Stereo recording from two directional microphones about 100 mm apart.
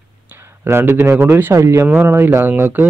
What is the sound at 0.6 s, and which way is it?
Speech, 25° right (ahead or behind).